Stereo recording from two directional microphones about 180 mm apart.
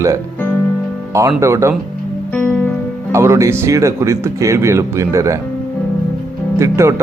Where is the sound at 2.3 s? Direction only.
10° left (ahead or behind).